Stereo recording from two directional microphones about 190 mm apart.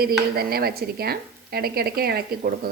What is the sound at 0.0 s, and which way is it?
Speech, 55° right (ahead or behind).